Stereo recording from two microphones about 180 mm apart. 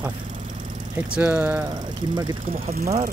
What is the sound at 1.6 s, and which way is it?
Speech, 25° right (ahead or behind).